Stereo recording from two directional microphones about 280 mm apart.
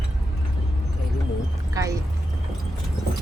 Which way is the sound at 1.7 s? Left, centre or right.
Centre.